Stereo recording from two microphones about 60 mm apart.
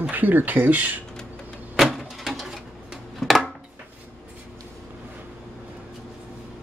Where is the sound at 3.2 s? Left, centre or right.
Centre.